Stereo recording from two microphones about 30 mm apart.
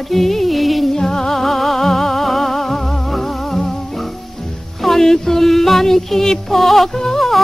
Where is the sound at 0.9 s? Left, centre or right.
Centre.